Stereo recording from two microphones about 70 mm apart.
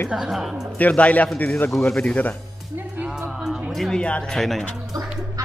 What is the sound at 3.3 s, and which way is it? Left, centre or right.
Music, centre.